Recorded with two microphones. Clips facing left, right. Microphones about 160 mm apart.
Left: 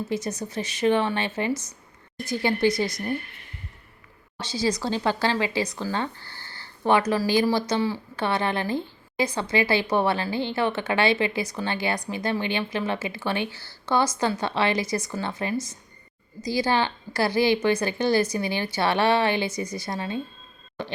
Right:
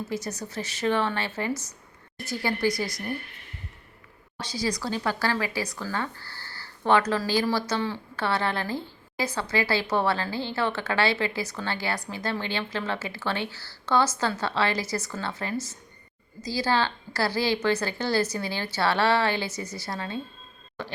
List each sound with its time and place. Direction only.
0.1 s speech: 20° left (ahead or behind)
4.4 s speech: 25° left (ahead or behind)